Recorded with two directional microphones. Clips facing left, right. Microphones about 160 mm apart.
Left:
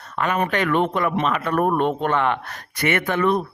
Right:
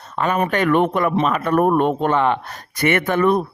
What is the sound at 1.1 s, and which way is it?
A man's voice, 40° right (ahead or behind).